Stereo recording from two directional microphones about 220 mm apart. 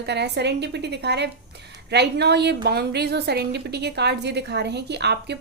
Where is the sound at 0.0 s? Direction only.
50° right (ahead or behind).